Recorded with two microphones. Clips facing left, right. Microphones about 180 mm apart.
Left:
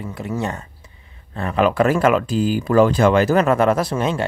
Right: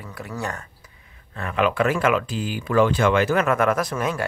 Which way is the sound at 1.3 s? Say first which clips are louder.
Left 4 dB; 35° left (ahead or behind).